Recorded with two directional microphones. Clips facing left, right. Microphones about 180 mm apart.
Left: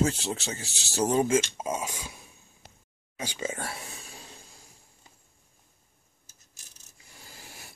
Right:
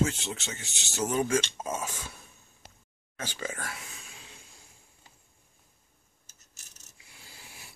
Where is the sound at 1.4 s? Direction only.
15° left (ahead or behind).